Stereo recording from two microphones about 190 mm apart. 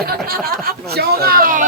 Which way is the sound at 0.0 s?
55° right (ahead or behind).